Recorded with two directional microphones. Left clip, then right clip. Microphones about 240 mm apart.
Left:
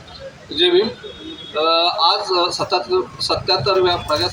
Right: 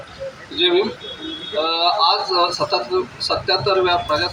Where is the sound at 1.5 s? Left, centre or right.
Left.